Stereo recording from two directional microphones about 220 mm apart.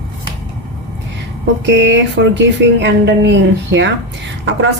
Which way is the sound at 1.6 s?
55° right (ahead or behind).